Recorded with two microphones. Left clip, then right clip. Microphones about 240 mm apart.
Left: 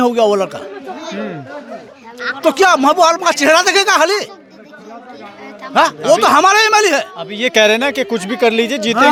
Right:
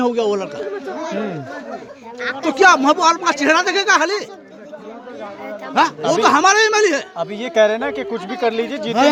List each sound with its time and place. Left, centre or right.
0.0 s speech: left
0.9 s speech: centre
2.4 s speech: left
5.7 s speech: left